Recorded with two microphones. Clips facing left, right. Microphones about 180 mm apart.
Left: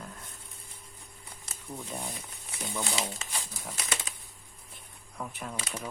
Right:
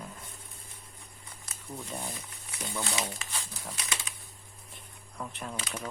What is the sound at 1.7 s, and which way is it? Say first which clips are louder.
Speech: even; 10° left (ahead or behind).